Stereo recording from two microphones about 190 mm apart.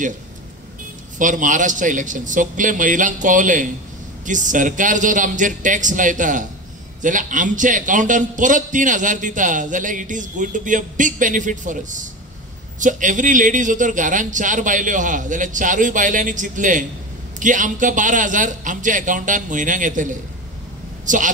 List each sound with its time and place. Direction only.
1.1 s a man's voice: 40° right (ahead or behind)